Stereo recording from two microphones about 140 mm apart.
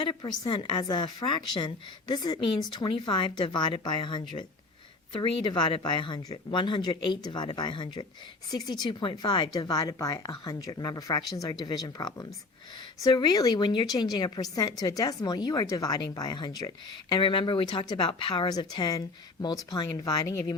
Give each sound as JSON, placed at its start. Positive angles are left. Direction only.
{"t": 0.1, "sound": "a woman's voice", "side_deg": 35}